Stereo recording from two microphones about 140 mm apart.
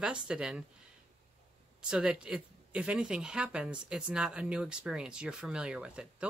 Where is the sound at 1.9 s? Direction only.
5° right (ahead or behind).